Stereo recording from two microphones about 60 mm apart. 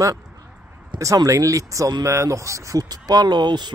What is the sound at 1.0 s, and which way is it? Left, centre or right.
Speech, right.